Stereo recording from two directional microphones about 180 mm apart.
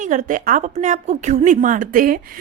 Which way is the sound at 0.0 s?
45° right (ahead or behind).